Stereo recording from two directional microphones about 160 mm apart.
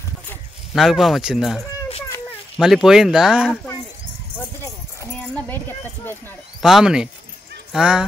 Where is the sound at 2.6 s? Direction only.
5° right (ahead or behind).